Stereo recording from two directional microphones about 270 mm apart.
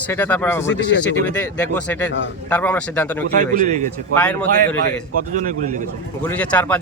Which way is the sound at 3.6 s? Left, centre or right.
Right.